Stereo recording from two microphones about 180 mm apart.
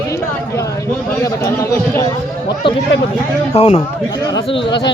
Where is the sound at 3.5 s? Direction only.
35° left (ahead or behind).